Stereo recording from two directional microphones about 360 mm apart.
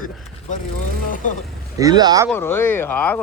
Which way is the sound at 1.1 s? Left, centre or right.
Left.